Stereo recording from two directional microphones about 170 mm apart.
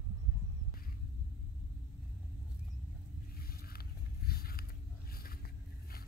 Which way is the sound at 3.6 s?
65° left (ahead or behind).